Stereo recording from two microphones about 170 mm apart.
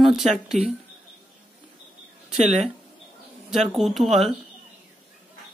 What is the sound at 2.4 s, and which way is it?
Speech, 40° right (ahead or behind).